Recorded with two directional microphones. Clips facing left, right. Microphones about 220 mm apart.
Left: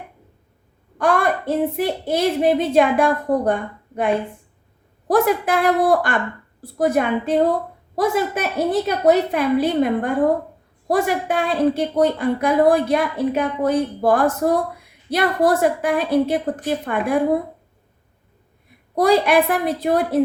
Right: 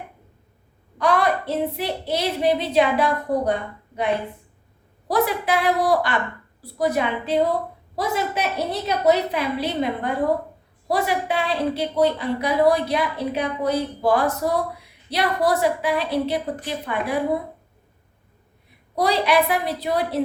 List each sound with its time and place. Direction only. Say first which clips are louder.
0.9 s a woman's voice: left 1 dB; 50° left (ahead or behind)
18.9 s a woman's voice: left 4 dB; 50° left (ahead or behind)